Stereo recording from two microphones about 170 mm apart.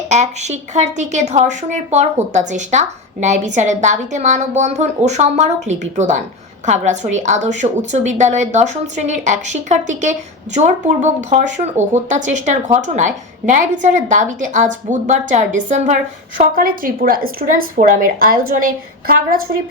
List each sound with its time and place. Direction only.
0.1 s a woman's voice: 40° right (ahead or behind)
16.6 s a woman's voice: 55° right (ahead or behind)